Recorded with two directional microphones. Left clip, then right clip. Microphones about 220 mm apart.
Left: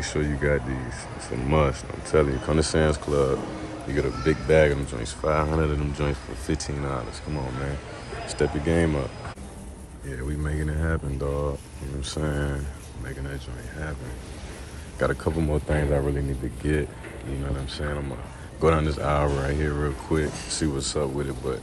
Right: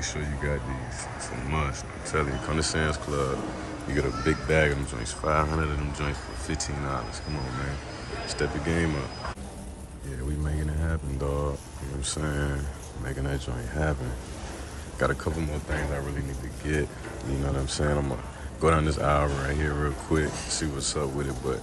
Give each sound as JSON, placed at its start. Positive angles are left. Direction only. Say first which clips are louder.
{"t": 0.2, "sound": "speech", "louder": "left 7 dB", "side_deg": 0}
{"t": 8.3, "sound": "speech", "louder": "left 5 dB", "side_deg": 0}
{"t": 10.4, "sound": "speech", "louder": "left 6 dB", "side_deg": 0}
{"t": 13.3, "sound": "speech", "louder": "right 4 dB", "side_deg": -20}
{"t": 15.0, "sound": "speech", "louder": "left 2 dB", "side_deg": 0}
{"t": 15.9, "sound": "a man's voice", "louder": "left 8 dB", "side_deg": 20}
{"t": 17.7, "sound": "speech", "louder": "right 5 dB", "side_deg": -20}
{"t": 18.6, "sound": "speech", "louder": "left 1 dB", "side_deg": -5}